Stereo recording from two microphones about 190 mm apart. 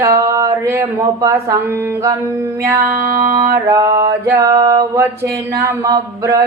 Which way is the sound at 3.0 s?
50° right (ahead or behind).